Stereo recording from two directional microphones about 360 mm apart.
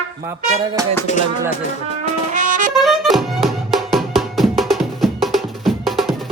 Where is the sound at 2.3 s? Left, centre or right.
Right.